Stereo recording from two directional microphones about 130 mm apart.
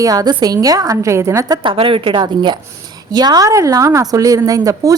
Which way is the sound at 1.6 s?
40° right (ahead or behind).